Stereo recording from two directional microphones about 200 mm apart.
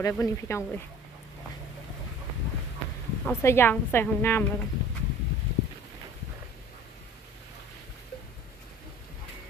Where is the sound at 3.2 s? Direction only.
10° left (ahead or behind).